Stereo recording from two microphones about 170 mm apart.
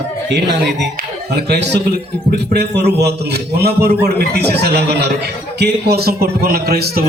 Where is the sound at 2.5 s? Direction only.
75° right (ahead or behind).